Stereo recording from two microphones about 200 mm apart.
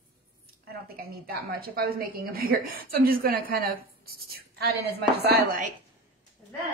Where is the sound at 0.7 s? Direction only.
50° right (ahead or behind).